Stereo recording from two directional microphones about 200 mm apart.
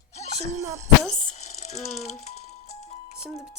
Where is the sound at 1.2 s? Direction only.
35° left (ahead or behind).